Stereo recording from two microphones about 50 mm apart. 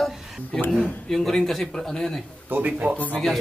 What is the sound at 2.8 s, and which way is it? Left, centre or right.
Speech, right.